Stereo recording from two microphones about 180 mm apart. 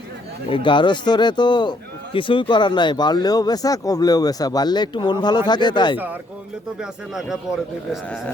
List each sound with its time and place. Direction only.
0.5 s speech: 25° left (ahead or behind)
6.7 s speech: centre (ahead or behind)